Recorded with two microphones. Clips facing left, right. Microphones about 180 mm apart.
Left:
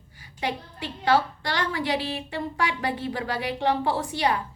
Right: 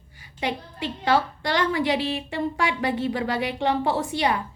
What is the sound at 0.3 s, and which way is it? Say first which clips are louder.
A woman's voice: right 2 dB; 15° right (ahead or behind).